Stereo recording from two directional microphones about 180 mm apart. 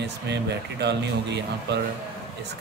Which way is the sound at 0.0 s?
70° right (ahead or behind).